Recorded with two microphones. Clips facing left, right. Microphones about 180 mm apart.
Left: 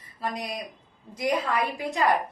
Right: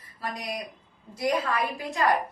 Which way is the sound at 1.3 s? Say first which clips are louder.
Left 1 dB; 20° left (ahead or behind).